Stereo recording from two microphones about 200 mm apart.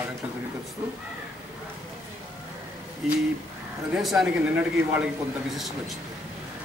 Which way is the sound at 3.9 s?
Centre (ahead or behind).